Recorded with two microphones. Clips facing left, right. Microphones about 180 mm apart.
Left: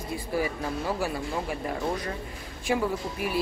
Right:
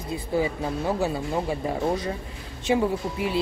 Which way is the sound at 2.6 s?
25° right (ahead or behind).